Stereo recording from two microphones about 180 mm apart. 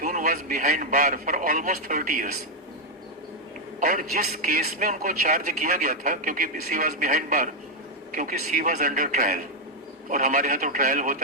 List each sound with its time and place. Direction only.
0.0 s a man's voice: 45° right (ahead or behind)
3.8 s a man's voice: 45° right (ahead or behind)